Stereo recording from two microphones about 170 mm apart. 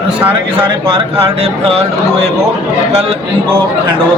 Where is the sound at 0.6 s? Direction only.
30° right (ahead or behind).